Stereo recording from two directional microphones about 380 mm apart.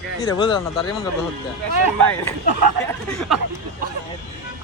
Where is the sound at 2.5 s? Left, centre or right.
Right.